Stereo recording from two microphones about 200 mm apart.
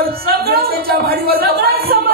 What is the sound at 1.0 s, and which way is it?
Speech, 50° right (ahead or behind).